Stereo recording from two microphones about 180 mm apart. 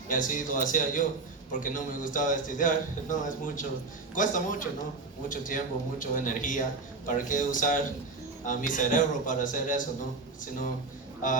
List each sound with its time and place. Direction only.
0.1 s a man's voice: 45° left (ahead or behind)
11.2 s a man's voice: 45° left (ahead or behind)